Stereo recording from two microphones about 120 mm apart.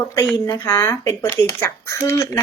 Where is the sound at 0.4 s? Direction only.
25° left (ahead or behind).